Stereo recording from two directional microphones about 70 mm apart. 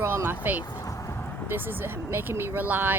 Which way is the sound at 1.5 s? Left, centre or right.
Right.